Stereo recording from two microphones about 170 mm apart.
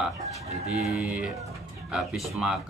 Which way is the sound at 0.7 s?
5° right (ahead or behind).